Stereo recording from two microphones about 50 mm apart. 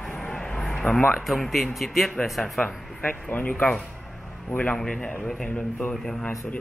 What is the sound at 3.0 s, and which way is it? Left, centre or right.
A man's voice, left.